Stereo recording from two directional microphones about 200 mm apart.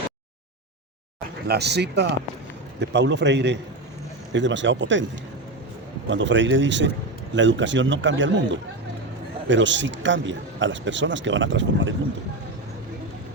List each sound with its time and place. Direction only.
1.5 s speech: 55° right (ahead or behind)
6.1 s a man's voice: 65° right (ahead or behind)